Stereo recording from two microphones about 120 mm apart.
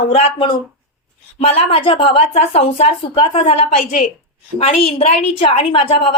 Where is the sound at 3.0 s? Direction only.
50° left (ahead or behind).